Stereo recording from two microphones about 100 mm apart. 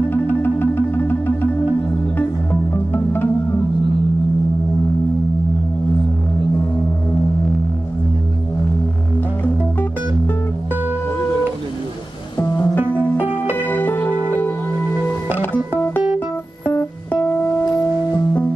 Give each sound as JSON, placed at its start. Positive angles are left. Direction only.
{"t": 0.1, "sound": "music", "side_deg": 20}
{"t": 9.4, "sound": "music", "side_deg": 20}
{"t": 12.5, "sound": "music", "side_deg": 20}